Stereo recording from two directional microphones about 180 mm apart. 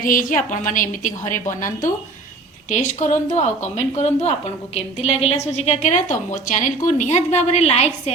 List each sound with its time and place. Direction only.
0.0 s a woman's voice: 50° left (ahead or behind)
2.6 s speech: 45° left (ahead or behind)